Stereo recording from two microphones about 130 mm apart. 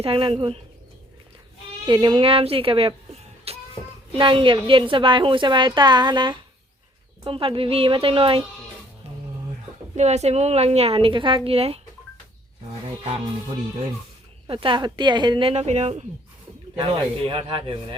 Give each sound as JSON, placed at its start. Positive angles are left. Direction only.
{"t": 0.0, "sound": "a woman's voice", "side_deg": -45}
{"t": 1.9, "sound": "speech", "side_deg": -40}
{"t": 4.1, "sound": "a woman's voice", "side_deg": -40}
{"t": 9.9, "sound": "a woman's voice", "side_deg": -60}
{"t": 14.4, "sound": "a woman's voice", "side_deg": -40}
{"t": 16.7, "sound": "a woman's voice", "side_deg": -35}